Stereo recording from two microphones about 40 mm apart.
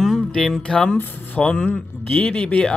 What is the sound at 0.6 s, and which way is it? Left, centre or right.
Speech, left.